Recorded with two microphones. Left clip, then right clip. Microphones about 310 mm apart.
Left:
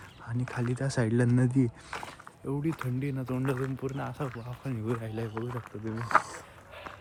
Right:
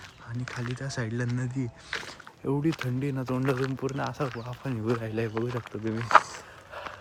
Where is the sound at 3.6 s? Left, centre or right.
Centre.